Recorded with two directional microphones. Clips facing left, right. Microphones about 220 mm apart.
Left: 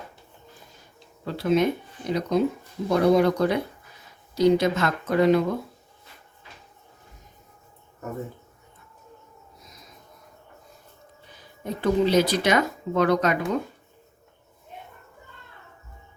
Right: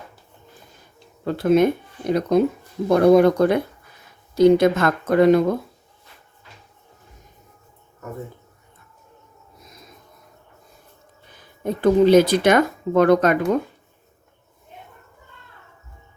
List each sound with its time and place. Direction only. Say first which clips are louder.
1.2 s speech: right 5 dB; 50° right (ahead or behind)
11.6 s speech: right 7 dB; 50° right (ahead or behind)